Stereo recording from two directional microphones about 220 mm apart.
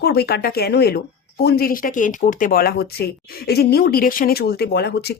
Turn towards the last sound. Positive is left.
turn(degrees=50)  # may be behind; listen again after turning